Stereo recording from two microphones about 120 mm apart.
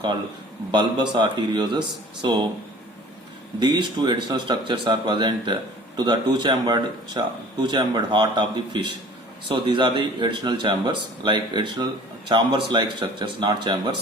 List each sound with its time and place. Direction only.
0.7 s speech: 40° right (ahead or behind)
3.6 s speech: 40° right (ahead or behind)